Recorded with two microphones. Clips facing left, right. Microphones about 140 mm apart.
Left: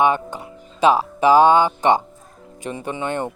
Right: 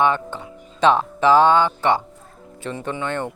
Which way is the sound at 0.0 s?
15° left (ahead or behind).